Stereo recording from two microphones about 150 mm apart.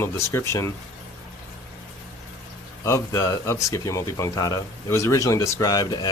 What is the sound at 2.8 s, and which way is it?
Speech, 20° left (ahead or behind).